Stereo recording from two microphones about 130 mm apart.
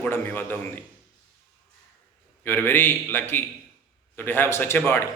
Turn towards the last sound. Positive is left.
turn(degrees=15)  # may be behind; listen again after turning